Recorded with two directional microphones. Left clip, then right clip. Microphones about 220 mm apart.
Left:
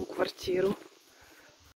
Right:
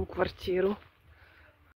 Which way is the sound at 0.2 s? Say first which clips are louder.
Even; centre (ahead or behind).